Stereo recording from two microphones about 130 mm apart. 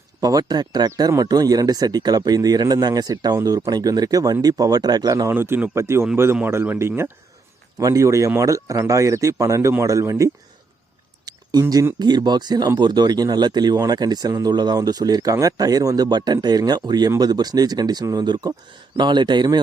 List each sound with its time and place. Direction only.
0.2 s speech: 30° right (ahead or behind)
11.3 s a sound: 30° right (ahead or behind)
11.9 s speech: 35° right (ahead or behind)